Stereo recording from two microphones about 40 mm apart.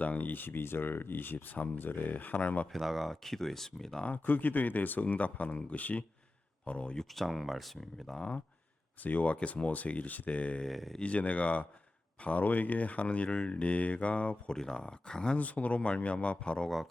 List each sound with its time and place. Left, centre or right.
0.0 s speech: left
2.7 s speech: centre
4.1 s speech: left
7.2 s speech: centre
7.8 s speech: centre
9.0 s speech: left
10.7 s speech: centre
11.0 s speech: left
14.5 s speech: centre
15.4 s speech: left
16.6 s speech: centre